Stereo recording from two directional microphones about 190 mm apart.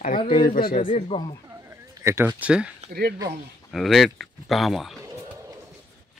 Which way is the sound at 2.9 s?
55° right (ahead or behind).